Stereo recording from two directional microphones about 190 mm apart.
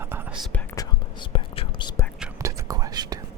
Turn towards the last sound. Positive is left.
turn(degrees=-20)  # may be behind; listen again after turning